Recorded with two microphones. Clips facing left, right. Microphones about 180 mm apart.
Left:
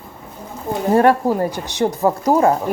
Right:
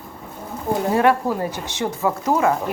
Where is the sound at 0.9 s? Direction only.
40° left (ahead or behind).